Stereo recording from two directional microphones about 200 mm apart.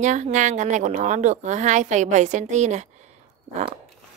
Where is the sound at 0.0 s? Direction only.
35° right (ahead or behind).